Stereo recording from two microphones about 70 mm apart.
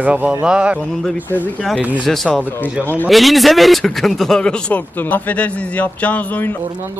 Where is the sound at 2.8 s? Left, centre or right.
Left.